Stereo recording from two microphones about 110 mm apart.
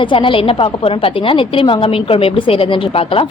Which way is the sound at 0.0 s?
50° left (ahead or behind).